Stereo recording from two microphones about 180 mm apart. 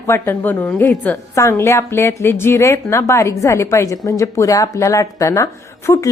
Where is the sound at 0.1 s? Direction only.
10° left (ahead or behind).